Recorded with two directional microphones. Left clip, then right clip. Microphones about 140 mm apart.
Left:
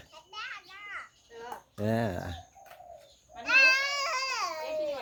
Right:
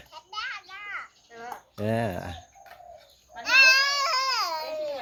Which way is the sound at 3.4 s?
80° right.